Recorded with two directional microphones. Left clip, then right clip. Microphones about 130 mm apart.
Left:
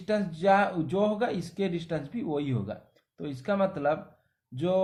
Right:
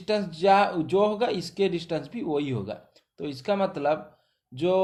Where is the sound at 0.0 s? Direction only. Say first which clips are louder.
Right 3 dB; 30° right (ahead or behind).